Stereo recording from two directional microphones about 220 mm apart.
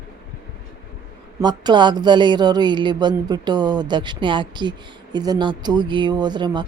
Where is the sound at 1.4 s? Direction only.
20° right (ahead or behind).